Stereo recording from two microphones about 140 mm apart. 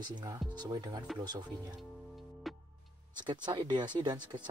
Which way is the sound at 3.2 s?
30° right (ahead or behind).